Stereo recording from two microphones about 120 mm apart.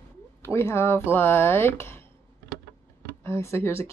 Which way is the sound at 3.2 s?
20° left (ahead or behind).